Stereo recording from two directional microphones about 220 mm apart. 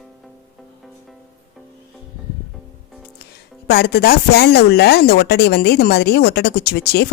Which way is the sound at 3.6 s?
45° left (ahead or behind).